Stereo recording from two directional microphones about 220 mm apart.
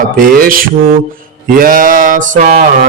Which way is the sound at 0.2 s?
40° right (ahead or behind).